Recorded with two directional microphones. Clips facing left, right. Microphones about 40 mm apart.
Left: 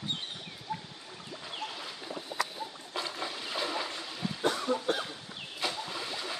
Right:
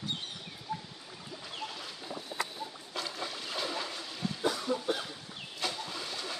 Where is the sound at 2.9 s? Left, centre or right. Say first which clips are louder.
Left 2 dB; centre.